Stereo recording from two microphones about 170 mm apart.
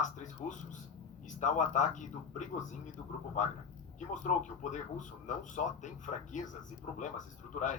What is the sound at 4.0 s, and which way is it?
A man's voice, 45° left (ahead or behind).